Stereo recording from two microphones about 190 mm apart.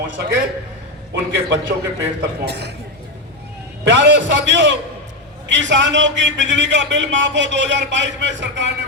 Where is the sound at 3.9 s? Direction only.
70° right (ahead or behind).